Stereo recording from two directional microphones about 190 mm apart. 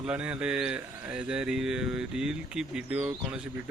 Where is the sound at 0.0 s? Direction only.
5° right (ahead or behind).